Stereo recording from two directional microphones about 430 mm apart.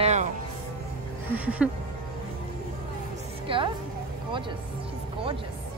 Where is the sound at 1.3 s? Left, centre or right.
Centre.